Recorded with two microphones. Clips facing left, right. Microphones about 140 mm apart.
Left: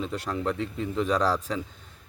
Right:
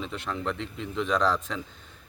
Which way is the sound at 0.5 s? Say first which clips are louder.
Left 5 dB; 45° left (ahead or behind).